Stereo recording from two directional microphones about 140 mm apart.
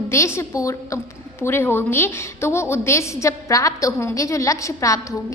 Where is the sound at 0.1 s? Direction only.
20° left (ahead or behind).